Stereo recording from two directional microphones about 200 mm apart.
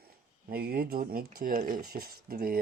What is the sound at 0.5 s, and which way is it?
Speech, 50° right (ahead or behind).